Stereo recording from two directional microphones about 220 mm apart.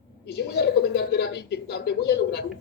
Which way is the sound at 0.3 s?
50° left (ahead or behind).